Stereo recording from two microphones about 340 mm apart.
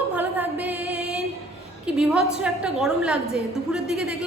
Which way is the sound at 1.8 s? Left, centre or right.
Centre.